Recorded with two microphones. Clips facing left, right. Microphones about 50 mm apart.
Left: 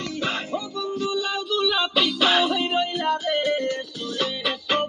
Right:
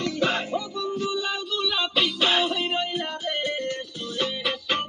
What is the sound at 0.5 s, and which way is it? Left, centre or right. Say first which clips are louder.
Music: even; centre.